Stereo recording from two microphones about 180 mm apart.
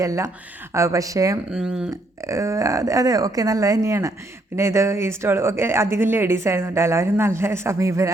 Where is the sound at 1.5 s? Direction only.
5° right (ahead or behind).